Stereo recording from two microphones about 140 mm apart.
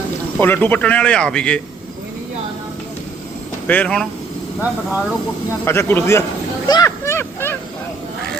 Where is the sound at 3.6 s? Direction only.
10° left (ahead or behind).